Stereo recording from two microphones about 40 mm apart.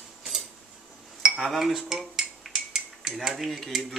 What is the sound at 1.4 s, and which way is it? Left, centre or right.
Cutlery, centre.